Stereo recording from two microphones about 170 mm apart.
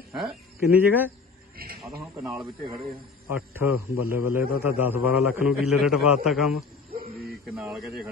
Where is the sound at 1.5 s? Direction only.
60° right (ahead or behind).